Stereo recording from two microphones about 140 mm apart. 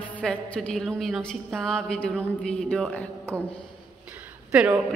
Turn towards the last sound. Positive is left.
turn(degrees=-10)  # may be behind; listen again after turning